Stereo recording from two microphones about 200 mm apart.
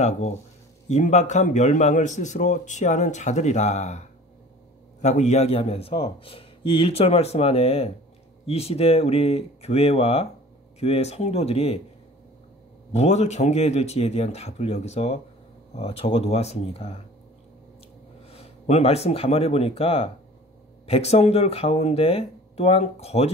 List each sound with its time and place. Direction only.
0.0 s a man's voice: 35° left (ahead or behind)
12.9 s a man's voice: 35° left (ahead or behind)
18.3 s a man's voice: 30° left (ahead or behind)